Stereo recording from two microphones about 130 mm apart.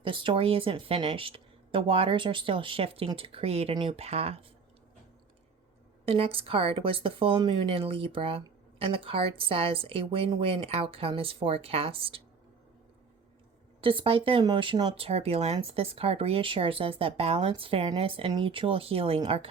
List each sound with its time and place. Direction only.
0.0 s a woman's voice: 40° right (ahead or behind)
6.1 s a woman's voice: 45° right (ahead or behind)
13.8 s a woman's voice: 45° right (ahead or behind)